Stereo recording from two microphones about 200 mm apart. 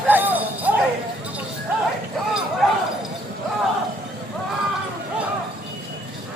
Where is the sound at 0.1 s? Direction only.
10° right (ahead or behind).